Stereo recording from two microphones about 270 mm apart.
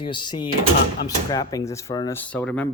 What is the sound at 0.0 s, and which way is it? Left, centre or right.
Speech, centre.